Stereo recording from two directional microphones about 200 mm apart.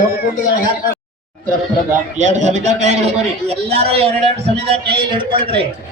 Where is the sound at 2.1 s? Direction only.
35° right (ahead or behind).